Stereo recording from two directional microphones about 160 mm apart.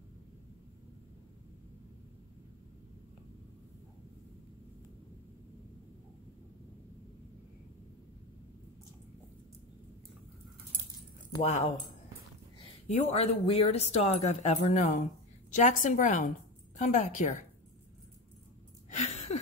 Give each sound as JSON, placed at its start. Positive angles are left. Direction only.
{"t": 11.4, "sound": "speech", "side_deg": 45}
{"t": 12.8, "sound": "speech", "side_deg": 40}
{"t": 18.9, "sound": "a sound", "side_deg": 45}